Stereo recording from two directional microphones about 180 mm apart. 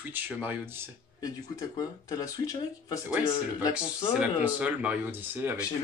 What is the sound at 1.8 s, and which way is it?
Speech, 20° left (ahead or behind).